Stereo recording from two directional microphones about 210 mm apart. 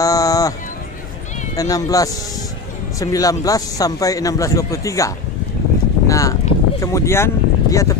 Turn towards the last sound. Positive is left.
turn(degrees=15)  # may be behind; listen again after turning